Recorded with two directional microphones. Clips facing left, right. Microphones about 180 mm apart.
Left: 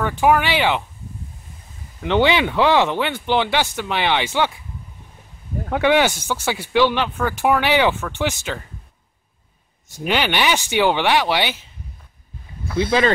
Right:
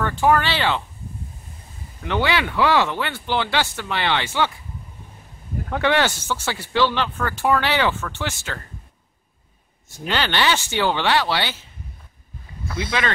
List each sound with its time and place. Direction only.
0.0 s speech: 15° left (ahead or behind)
2.0 s speech: 20° left (ahead or behind)
5.7 s speech: 15° left (ahead or behind)
10.0 s speech: 15° left (ahead or behind)
12.7 s speech: 30° left (ahead or behind)